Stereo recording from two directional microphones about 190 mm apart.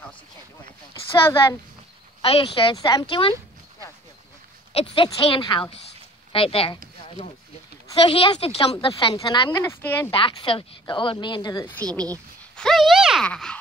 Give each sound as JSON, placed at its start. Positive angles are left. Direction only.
{"t": 2.2, "sound": "speech", "side_deg": 30}
{"t": 4.7, "sound": "speech", "side_deg": 30}
{"t": 7.9, "sound": "speech", "side_deg": 30}
{"t": 10.1, "sound": "speech", "side_deg": 25}
{"t": 12.5, "sound": "speech", "side_deg": 0}